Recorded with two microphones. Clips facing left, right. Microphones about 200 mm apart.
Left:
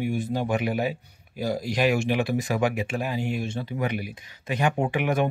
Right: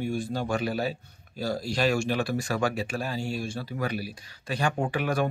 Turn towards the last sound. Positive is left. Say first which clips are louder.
# left 3 dB
turn(degrees=20)  # may be behind; listen again after turning